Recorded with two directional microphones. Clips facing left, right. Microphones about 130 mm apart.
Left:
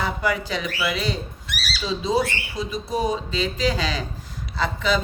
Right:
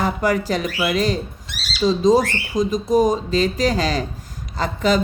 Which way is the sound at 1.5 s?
25° right (ahead or behind).